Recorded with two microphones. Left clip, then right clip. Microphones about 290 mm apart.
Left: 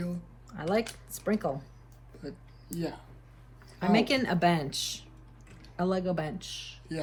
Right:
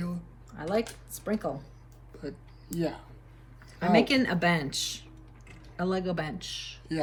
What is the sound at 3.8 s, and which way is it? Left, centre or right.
Speech, centre.